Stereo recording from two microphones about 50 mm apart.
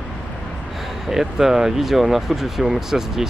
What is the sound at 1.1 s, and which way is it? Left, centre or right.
Speech, centre.